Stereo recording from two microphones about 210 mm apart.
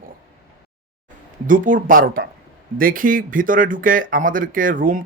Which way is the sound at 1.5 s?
40° right (ahead or behind).